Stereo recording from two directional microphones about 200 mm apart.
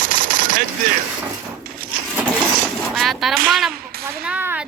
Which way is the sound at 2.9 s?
Centre (ahead or behind).